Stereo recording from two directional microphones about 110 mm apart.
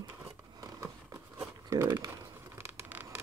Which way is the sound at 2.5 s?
25° right (ahead or behind).